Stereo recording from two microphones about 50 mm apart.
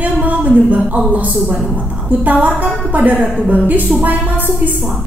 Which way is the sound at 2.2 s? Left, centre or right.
Right.